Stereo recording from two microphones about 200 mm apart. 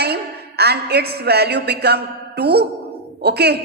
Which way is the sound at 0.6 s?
55° right (ahead or behind).